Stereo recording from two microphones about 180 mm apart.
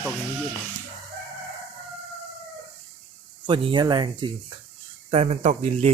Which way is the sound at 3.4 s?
25° right (ahead or behind).